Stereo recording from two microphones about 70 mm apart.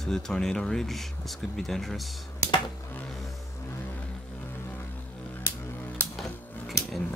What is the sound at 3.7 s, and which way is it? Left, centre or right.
Vehicle, left.